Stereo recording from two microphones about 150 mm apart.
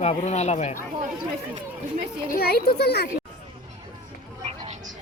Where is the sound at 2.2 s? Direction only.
80° left.